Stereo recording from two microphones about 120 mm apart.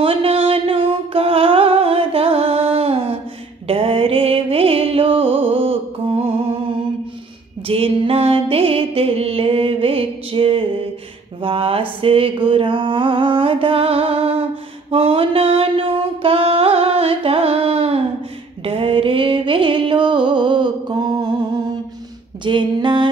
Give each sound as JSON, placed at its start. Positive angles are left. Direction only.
{"t": 0.0, "sound": "music", "side_deg": -50}
{"t": 7.6, "sound": "music", "side_deg": -50}
{"t": 11.4, "sound": "a sound", "side_deg": -50}
{"t": 14.9, "sound": "mantra", "side_deg": -55}
{"t": 18.6, "sound": "music", "side_deg": -50}
{"t": 22.4, "sound": "a sound", "side_deg": -40}